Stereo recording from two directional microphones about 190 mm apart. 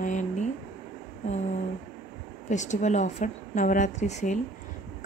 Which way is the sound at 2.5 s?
40° left (ahead or behind).